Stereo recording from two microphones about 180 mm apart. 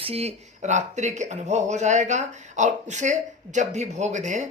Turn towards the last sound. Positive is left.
turn(degrees=-40)  # may be behind; listen again after turning